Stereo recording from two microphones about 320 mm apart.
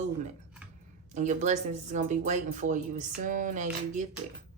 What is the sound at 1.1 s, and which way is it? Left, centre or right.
Speech, right.